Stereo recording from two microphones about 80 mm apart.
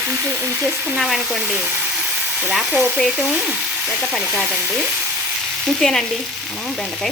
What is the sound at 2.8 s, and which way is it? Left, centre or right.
Speech, centre.